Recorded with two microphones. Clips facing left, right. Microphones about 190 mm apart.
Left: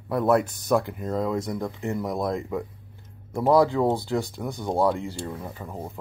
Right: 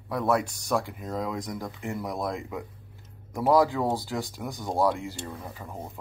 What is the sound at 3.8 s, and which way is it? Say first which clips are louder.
Speech: left 5 dB; 5° right (ahead or behind).